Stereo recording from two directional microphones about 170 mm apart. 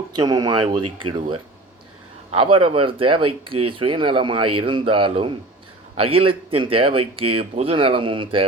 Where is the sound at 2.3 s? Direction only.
30° right (ahead or behind).